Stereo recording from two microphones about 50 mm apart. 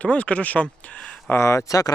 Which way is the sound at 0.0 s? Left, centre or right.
Left.